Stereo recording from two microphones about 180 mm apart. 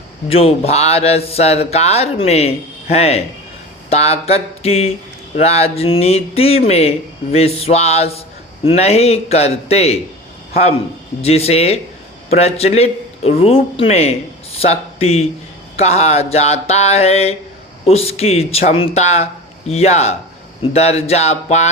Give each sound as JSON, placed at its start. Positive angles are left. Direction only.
{"t": 0.3, "sound": "speech", "side_deg": 35}